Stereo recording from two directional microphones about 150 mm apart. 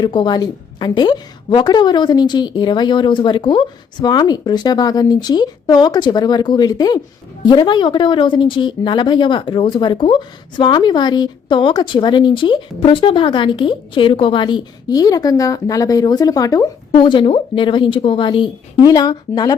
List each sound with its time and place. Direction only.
0.0 s a woman's voice: 30° left (ahead or behind)